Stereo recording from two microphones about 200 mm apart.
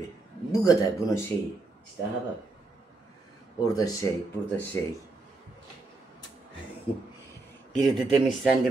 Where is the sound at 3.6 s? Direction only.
20° left (ahead or behind).